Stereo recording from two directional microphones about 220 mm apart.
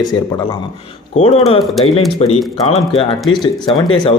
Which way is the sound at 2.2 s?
30° left (ahead or behind).